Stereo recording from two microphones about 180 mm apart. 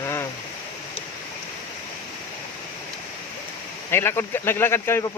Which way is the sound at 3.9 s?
15° left (ahead or behind).